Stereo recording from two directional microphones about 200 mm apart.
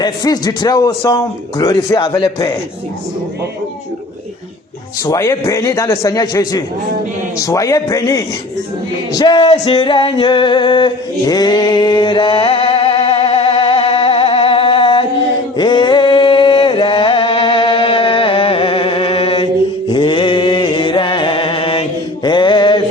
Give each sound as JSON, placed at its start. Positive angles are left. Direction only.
{"t": 0.0, "sound": "a man's voice", "side_deg": 20}
{"t": 5.0, "sound": "a man's voice", "side_deg": 15}
{"t": 9.1, "sound": "music", "side_deg": 25}
{"t": 19.9, "sound": "chant", "side_deg": 25}